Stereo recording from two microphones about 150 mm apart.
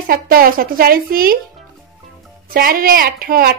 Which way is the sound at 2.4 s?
75° right (ahead or behind).